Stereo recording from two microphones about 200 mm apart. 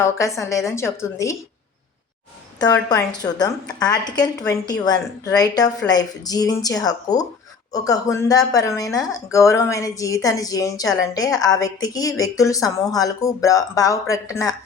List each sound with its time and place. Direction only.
0.0 s a woman's voice: 15° left (ahead or behind)
3.2 s a woman's voice: 20° left (ahead or behind)